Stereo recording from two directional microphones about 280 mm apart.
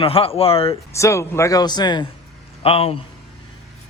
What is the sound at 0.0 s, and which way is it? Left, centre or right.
Speech, centre.